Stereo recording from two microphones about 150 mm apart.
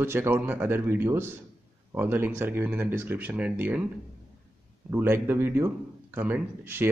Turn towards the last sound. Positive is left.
turn(degrees=-15)  # may be behind; listen again after turning